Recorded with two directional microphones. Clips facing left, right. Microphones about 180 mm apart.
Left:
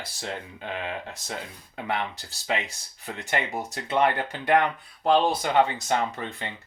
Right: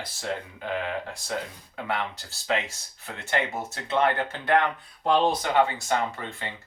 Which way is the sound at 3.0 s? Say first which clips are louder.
Right 1 dB; 15° left (ahead or behind).